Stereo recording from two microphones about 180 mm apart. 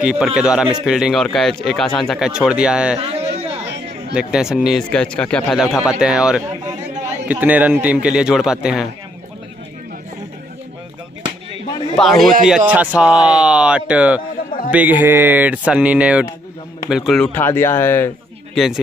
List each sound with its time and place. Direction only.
0.0 s speech: 5° right (ahead or behind)
3.0 s speech: 35° right (ahead or behind)
4.1 s speech: 5° right (ahead or behind)
12.0 s speech: centre (ahead or behind)
18.5 s a man's voice: centre (ahead or behind)